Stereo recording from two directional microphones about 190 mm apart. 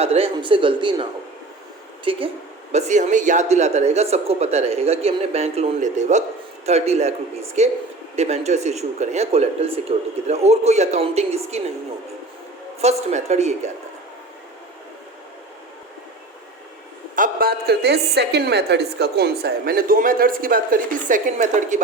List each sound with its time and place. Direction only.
0.0 s speech: 30° right (ahead or behind)
2.0 s a woman's voice: 30° right (ahead or behind)
12.8 s a woman's voice: 35° right (ahead or behind)
17.2 s a woman's voice: 45° right (ahead or behind)